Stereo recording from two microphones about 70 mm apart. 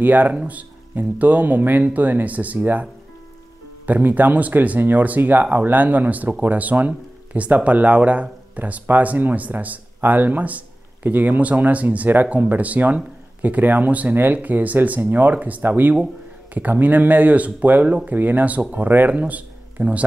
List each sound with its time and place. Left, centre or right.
0.0 s speech: right